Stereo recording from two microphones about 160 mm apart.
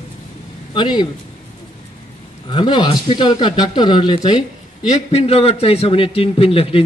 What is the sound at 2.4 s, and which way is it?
Speech, 30° left (ahead or behind).